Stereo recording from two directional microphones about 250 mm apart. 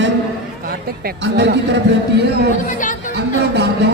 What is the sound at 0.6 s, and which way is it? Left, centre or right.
A man's voice, right.